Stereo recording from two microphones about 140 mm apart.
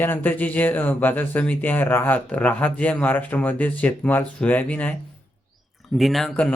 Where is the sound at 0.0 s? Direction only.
15° left (ahead or behind).